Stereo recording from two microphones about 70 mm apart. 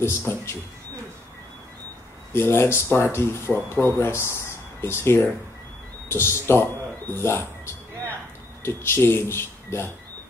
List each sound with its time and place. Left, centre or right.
0.3 s speech: left
2.3 s speech: left